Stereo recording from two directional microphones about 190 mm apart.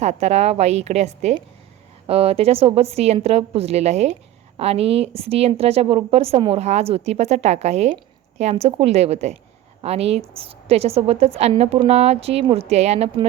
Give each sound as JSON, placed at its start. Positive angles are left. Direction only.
{"t": 0.0, "sound": "a woman's voice", "side_deg": -35}